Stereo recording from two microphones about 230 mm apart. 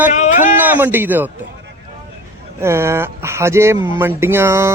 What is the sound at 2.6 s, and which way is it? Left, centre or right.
Speech, centre.